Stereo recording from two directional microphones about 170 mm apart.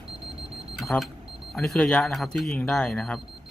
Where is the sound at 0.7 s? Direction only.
Centre (ahead or behind).